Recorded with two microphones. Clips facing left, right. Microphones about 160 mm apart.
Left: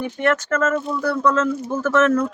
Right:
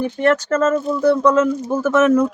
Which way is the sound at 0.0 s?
35° right (ahead or behind).